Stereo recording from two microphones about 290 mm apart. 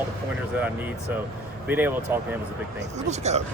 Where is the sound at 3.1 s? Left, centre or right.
Right.